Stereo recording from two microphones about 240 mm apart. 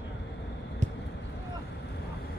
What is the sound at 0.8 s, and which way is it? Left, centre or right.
Basketball bounce, right.